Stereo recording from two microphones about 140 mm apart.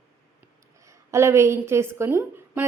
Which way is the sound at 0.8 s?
20° right (ahead or behind).